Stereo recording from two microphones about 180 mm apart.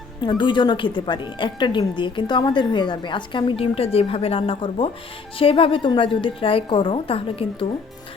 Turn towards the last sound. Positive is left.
turn(degrees=30)  # may be behind; listen again after turning